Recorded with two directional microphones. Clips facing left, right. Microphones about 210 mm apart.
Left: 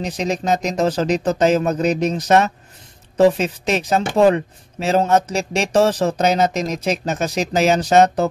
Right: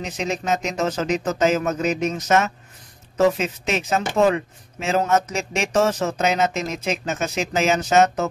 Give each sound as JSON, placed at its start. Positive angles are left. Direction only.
{"t": 0.0, "sound": "speech", "side_deg": 35}